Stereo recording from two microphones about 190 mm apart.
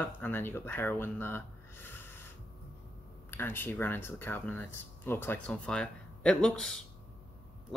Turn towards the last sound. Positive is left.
turn(degrees=5)  # may be behind; listen again after turning